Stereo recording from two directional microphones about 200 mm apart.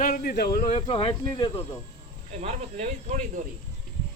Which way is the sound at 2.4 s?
35° right (ahead or behind).